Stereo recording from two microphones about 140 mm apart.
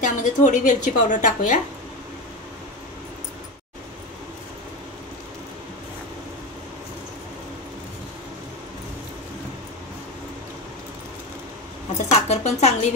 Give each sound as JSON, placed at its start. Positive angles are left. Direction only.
{"t": 0.0, "sound": "a woman's voice", "side_deg": 65}
{"t": 12.1, "sound": "speech", "side_deg": 50}